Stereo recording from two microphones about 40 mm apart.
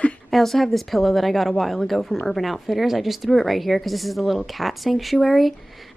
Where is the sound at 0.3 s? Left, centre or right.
Centre.